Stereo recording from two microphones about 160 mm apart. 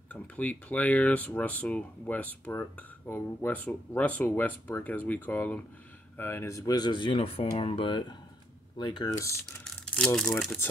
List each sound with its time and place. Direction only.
0.1 s speech: 10° left (ahead or behind)
9.7 s speech: centre (ahead or behind)